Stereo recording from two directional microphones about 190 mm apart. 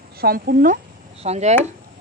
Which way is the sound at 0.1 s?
50° right (ahead or behind).